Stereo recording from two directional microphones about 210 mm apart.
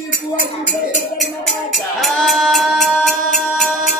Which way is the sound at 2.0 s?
Centre (ahead or behind).